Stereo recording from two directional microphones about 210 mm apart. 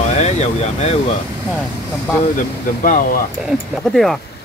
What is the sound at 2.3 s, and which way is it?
Speech, 40° left (ahead or behind).